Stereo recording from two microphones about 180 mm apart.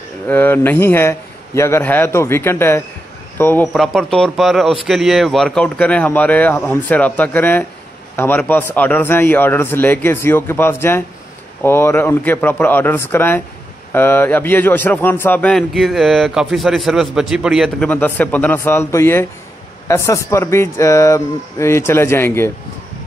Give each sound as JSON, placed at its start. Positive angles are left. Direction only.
{"t": 0.3, "sound": "a man's voice", "side_deg": 10}
{"t": 3.7, "sound": "a man's voice", "side_deg": 0}